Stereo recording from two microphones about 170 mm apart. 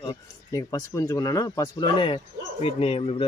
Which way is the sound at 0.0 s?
25° left (ahead or behind).